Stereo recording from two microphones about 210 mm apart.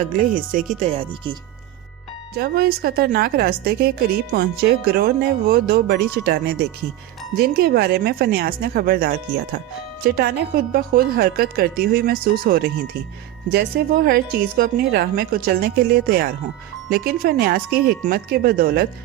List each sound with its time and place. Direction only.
0.2 s speech: 40° right (ahead or behind)
0.8 s speech: 30° right (ahead or behind)
2.3 s a woman's voice: 45° right (ahead or behind)